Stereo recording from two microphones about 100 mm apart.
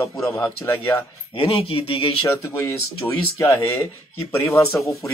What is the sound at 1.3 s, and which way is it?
Speech, 70° left (ahead or behind).